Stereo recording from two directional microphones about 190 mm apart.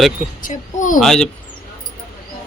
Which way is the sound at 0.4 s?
40° left (ahead or behind).